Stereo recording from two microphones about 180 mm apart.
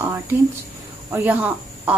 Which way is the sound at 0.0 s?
15° right (ahead or behind).